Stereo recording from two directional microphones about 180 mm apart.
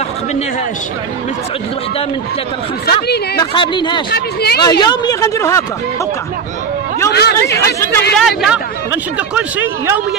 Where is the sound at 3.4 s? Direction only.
25° left (ahead or behind).